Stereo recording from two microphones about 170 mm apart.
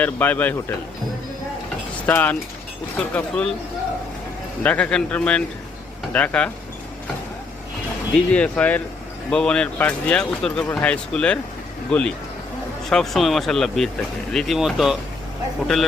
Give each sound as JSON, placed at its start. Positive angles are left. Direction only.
{"t": 0.0, "sound": "speech", "side_deg": 10}
{"t": 2.0, "sound": "speech", "side_deg": 10}
{"t": 4.6, "sound": "speech", "side_deg": 10}
{"t": 8.1, "sound": "speech", "side_deg": 5}